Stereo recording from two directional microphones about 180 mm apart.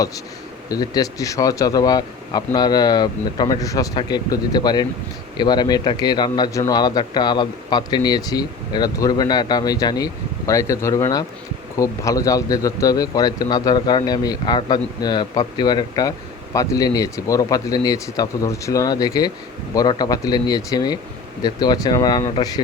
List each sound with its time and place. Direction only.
0.7 s a man's voice: 20° left (ahead or behind)